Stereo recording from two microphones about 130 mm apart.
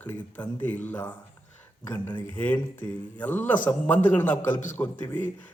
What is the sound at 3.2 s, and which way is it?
A man's voice, 15° left (ahead or behind).